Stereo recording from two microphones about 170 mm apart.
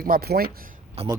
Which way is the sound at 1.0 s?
35° right (ahead or behind).